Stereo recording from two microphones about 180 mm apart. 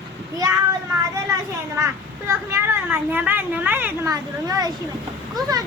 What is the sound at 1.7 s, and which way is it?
A child's voice, 15° right (ahead or behind).